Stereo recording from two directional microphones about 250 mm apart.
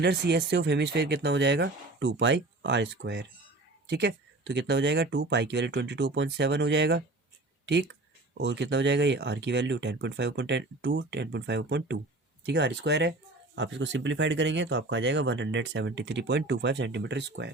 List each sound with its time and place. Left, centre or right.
0.0 s speech: right
8.4 s speech: right